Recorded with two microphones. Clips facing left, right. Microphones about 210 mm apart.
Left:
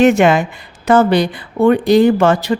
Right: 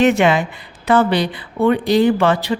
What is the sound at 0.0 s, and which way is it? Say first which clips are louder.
Speech: left 3 dB; 45° left (ahead or behind).